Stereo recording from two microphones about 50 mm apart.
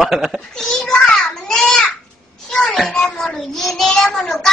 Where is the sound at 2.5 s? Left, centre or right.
Centre.